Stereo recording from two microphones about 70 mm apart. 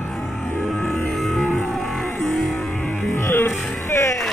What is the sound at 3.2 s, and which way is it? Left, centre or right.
Music, left.